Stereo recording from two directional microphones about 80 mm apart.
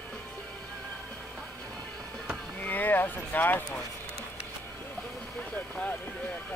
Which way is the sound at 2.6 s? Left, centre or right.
Left.